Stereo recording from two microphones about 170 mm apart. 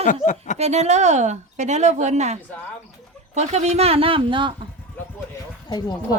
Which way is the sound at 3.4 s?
40° right (ahead or behind).